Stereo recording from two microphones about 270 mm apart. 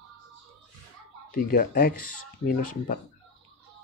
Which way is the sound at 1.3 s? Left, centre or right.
Left.